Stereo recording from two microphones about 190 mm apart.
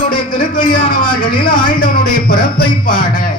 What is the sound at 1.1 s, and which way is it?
Speech, 25° left (ahead or behind).